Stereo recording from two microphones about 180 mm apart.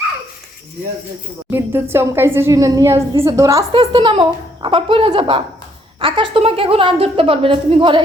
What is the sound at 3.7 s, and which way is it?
A woman's voice, 30° right (ahead or behind).